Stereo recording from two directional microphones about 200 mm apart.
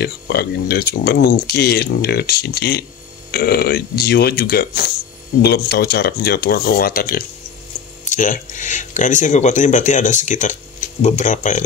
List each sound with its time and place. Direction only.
0.0 s speech: 55° left (ahead or behind); by 11.6 s 40° left (ahead or behind)